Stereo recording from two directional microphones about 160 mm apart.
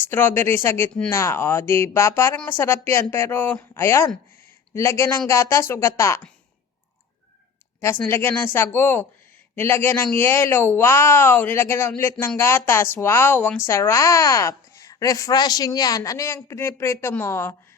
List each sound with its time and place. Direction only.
0.0 s speech: 15° left (ahead or behind)
7.8 s a woman's voice: 15° left (ahead or behind)